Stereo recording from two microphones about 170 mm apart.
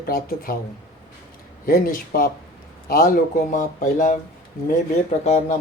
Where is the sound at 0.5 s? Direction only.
55° left (ahead or behind).